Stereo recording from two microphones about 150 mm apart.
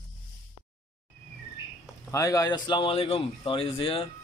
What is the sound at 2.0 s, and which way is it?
Speech, 20° left (ahead or behind).